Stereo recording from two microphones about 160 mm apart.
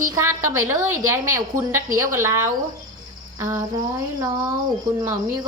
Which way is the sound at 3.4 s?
15° right (ahead or behind).